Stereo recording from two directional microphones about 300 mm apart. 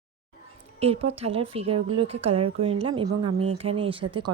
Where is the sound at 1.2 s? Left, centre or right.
Centre.